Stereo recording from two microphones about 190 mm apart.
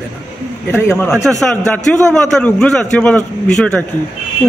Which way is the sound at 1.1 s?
Centre (ahead or behind).